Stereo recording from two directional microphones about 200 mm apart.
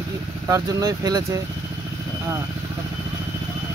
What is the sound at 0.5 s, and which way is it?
Speech, 15° right (ahead or behind).